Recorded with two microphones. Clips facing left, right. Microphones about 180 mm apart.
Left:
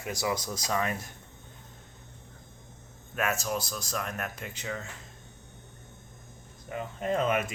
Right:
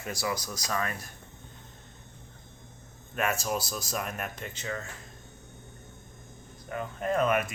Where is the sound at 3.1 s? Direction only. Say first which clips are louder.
Right 1 dB; centre (ahead or behind).